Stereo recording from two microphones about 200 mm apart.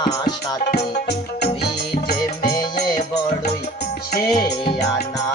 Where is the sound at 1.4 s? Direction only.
50° left (ahead or behind).